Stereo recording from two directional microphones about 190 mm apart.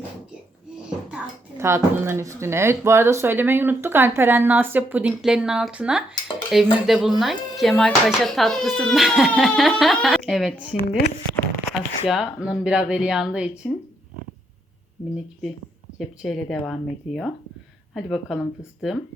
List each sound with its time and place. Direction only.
1.5 s speech: 15° right (ahead or behind)
10.8 s speech: 60° left (ahead or behind)
11.7 s speech: centre (ahead or behind)
16.0 s speech: centre (ahead or behind)